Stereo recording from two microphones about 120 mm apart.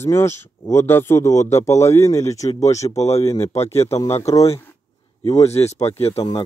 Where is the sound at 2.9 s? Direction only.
65° left (ahead or behind).